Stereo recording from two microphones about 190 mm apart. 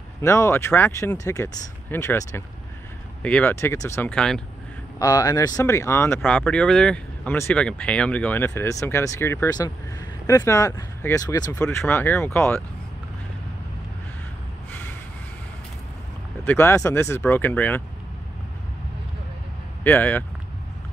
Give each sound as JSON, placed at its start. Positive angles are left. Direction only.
{"t": 0.2, "sound": "speech", "side_deg": 15}
{"t": 4.9, "sound": "speech", "side_deg": 20}
{"t": 16.4, "sound": "speech", "side_deg": 15}
{"t": 19.8, "sound": "speech", "side_deg": 10}